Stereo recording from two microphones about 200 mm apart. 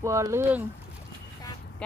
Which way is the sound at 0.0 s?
15° right (ahead or behind).